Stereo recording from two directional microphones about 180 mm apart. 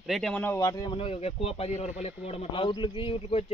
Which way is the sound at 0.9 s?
30° left (ahead or behind).